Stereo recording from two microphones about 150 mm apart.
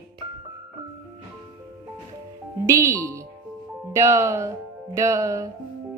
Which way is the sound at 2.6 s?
20° right (ahead or behind).